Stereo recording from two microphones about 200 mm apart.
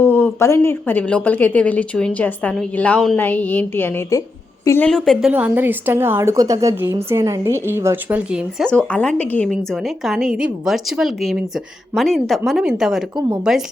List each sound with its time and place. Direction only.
0.0 s a woman's voice: 10° left (ahead or behind)
4.9 s speech: centre (ahead or behind)
5.3 s a woman's voice: 10° right (ahead or behind)